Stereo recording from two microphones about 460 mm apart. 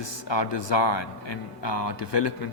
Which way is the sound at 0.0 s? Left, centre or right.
Left.